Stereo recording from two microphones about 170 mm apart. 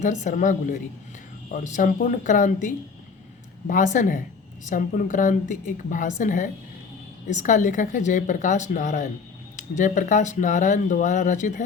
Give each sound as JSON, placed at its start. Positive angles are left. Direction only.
{"t": 0.0, "sound": "speech", "side_deg": 45}